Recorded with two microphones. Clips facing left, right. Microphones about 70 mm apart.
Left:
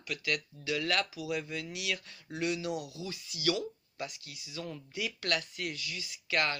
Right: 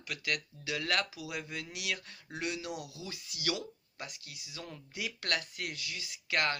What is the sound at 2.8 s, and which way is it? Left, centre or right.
Speech, left.